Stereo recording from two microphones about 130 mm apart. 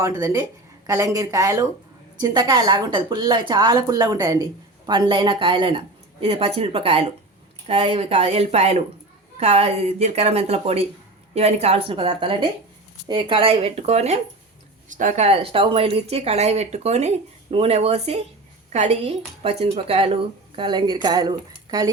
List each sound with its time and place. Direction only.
0.2 s a woman's voice: 25° right (ahead or behind); by 14.2 s 55° right (ahead or behind)
14.8 s a woman's voice: 75° right (ahead or behind); by 20.1 s 50° right (ahead or behind)
20.6 s a woman's voice: 35° right (ahead or behind)